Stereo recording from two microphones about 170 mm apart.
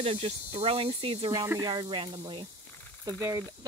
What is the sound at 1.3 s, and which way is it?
Speech, 20° right (ahead or behind).